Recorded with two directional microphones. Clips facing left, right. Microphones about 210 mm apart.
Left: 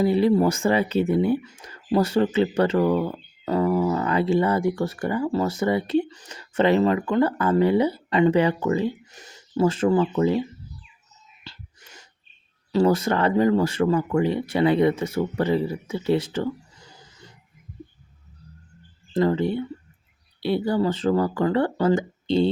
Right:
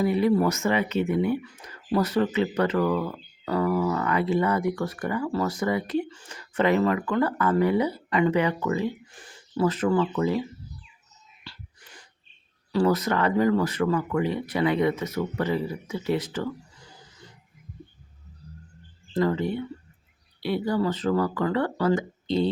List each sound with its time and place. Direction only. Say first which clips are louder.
0.0 s speech: left 3 dB; 30° left (ahead or behind)
9.2 s speech: left 3 dB; 25° left (ahead or behind)
11.5 s whispering: left 1 dB; 25° left (ahead or behind)
12.7 s speech: left 3 dB; 30° left (ahead or behind)
19.2 s speech: left 3 dB; 30° left (ahead or behind)